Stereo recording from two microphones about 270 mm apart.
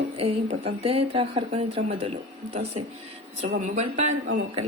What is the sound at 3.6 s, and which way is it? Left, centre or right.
Speech, right.